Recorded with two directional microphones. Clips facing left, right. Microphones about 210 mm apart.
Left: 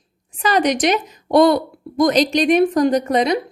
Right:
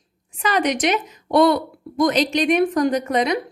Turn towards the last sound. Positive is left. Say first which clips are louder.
# left 3 dB
turn(degrees=35)  # may be behind; listen again after turning